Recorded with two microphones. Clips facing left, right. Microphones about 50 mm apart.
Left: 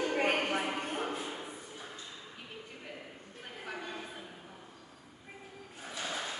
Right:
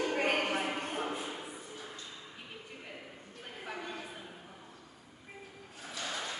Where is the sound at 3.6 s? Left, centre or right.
Centre.